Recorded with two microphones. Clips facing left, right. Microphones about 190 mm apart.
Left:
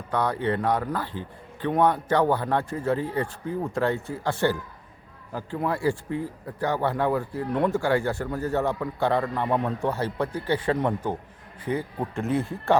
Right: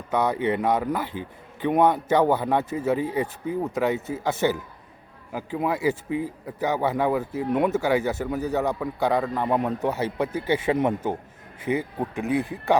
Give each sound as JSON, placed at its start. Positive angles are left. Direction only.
{"t": 0.1, "sound": "a man's voice", "side_deg": -20}